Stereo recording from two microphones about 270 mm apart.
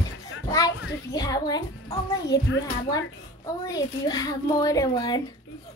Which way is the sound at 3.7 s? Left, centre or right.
Centre.